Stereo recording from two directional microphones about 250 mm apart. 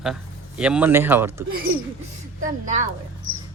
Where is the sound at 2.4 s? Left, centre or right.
Right.